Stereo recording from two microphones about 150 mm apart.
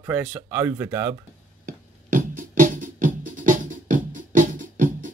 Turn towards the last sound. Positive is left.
turn(degrees=-60)  # may be behind; listen again after turning